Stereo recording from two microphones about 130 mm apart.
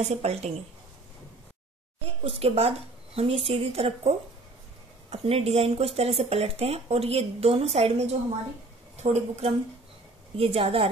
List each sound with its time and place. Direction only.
0.1 s a woman's voice: 55° right (ahead or behind)
2.0 s speech: 50° right (ahead or behind)
5.1 s a woman's voice: 50° right (ahead or behind)